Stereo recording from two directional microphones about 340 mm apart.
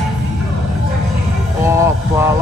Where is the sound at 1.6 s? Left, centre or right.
Centre.